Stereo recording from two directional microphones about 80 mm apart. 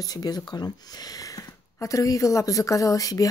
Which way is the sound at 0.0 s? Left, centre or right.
Left.